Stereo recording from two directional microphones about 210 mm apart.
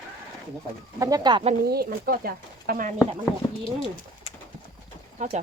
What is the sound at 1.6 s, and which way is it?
Speech, 50° right (ahead or behind).